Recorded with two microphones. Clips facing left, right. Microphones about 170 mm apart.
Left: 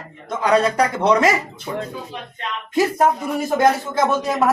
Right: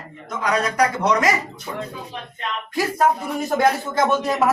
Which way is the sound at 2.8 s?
20° left (ahead or behind).